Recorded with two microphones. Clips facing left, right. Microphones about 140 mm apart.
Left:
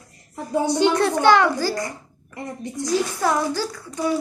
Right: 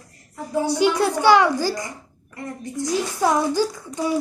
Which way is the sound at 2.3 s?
20° left (ahead or behind).